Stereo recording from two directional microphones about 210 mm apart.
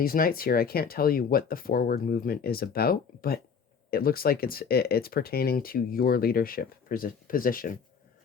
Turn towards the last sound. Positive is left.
turn(degrees=40)  # may be behind; listen again after turning